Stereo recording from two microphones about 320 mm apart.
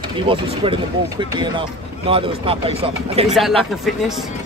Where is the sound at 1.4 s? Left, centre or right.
Centre.